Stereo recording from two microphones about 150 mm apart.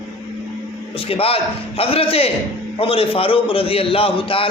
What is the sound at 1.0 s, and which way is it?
A man's voice, 40° left (ahead or behind).